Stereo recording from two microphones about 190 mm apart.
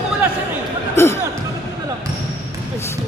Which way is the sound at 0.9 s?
15° left (ahead or behind).